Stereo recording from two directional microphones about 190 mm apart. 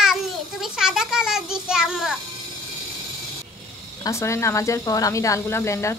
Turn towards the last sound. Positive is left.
turn(degrees=15)  # may be behind; listen again after turning